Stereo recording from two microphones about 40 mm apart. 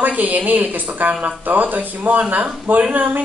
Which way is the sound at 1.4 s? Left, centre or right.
Right.